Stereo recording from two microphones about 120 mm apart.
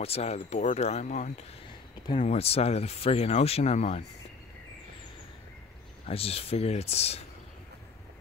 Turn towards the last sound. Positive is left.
turn(degrees=60)  # may be behind; listen again after turning